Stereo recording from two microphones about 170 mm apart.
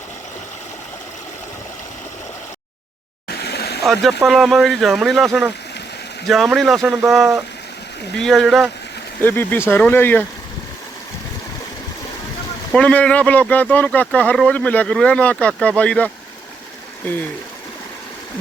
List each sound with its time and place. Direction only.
3.2 s a sound: 75° left (ahead or behind)
4.3 s speech: centre (ahead or behind)
9.2 s speech: 10° left (ahead or behind)
12.7 s speech: 5° left (ahead or behind)